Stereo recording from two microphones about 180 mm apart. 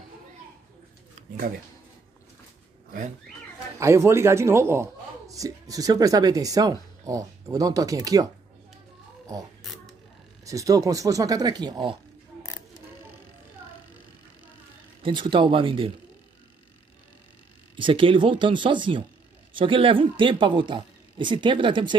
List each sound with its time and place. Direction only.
3.8 s speech: 15° right (ahead or behind)
10.4 s speech: 20° right (ahead or behind)
15.0 s speech: 25° right (ahead or behind)
17.7 s speech: 30° right (ahead or behind)